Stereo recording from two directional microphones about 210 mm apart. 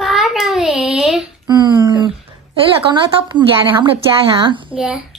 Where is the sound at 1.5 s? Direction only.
20° right (ahead or behind).